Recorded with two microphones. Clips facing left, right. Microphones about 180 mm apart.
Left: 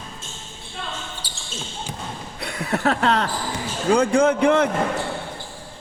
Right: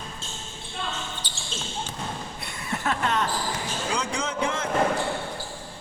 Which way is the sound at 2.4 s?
65° left (ahead or behind).